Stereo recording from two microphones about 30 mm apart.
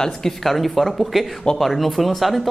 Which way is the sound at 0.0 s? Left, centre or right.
Centre.